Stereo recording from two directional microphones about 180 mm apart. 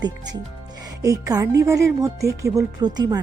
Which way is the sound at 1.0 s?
20° right (ahead or behind).